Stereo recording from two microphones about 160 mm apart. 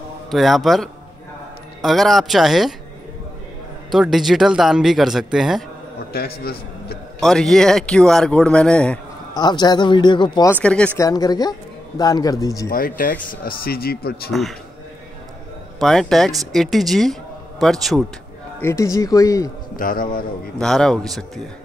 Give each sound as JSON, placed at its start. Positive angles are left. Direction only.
{"t": 0.3, "sound": "speech", "side_deg": 0}
{"t": 3.9, "sound": "speech", "side_deg": 0}
{"t": 6.1, "sound": "a man's voice", "side_deg": 75}
{"t": 7.2, "sound": "speech", "side_deg": 0}
{"t": 9.3, "sound": "speech", "side_deg": 25}
{"t": 10.5, "sound": "speech", "side_deg": 5}
{"t": 11.0, "sound": "speech", "side_deg": 25}
{"t": 12.6, "sound": "speech", "side_deg": 60}
{"t": 15.8, "sound": "speech", "side_deg": 0}
{"t": 18.6, "sound": "speech", "side_deg": 20}
{"t": 19.8, "sound": "speech", "side_deg": 60}
{"t": 20.5, "sound": "speech", "side_deg": 5}